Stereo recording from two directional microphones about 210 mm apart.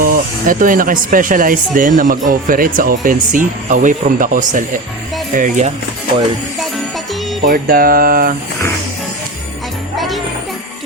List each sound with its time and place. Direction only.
0.0 s speech: 40° right (ahead or behind)
6.6 s jingle bell: centre (ahead or behind)
7.4 s a sound: 40° right (ahead or behind)
10.0 s jingle bell: centre (ahead or behind)